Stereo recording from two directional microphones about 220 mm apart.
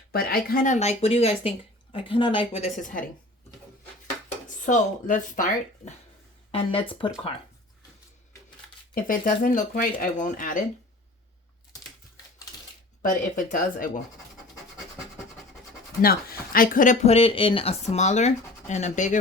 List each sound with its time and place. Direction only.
0.1 s speech: 45° left (ahead or behind)
4.0 s speech: 35° left (ahead or behind)
6.5 s speech: 25° left (ahead or behind)
9.0 s speech: 40° left (ahead or behind)
13.0 s speech: 35° left (ahead or behind)
16.0 s speech: 40° left (ahead or behind)